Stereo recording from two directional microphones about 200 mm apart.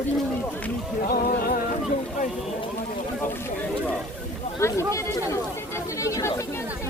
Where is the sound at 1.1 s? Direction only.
50° left (ahead or behind).